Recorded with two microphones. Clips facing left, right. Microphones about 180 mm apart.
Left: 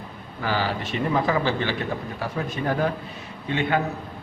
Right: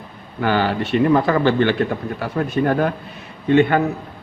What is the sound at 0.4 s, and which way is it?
A man's voice, 65° right (ahead or behind).